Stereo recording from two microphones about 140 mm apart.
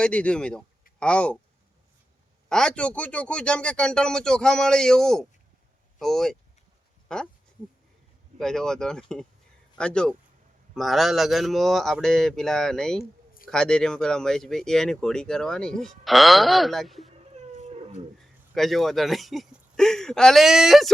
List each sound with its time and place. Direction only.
0.0 s speech: 10° left (ahead or behind)
2.5 s speech: 5° left (ahead or behind)
8.4 s speech: 5° left (ahead or behind)
17.3 s cat: 50° right (ahead or behind)
18.2 s speech: centre (ahead or behind)